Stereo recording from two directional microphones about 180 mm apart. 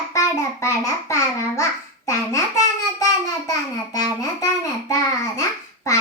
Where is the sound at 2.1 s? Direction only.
15° left (ahead or behind).